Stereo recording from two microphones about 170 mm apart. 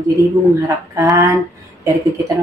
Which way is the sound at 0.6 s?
20° right (ahead or behind).